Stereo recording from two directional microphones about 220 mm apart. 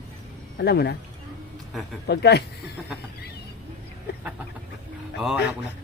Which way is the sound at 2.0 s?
50° left (ahead or behind).